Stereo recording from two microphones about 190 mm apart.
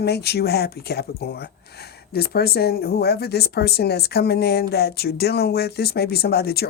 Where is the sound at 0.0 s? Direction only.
60° left (ahead or behind).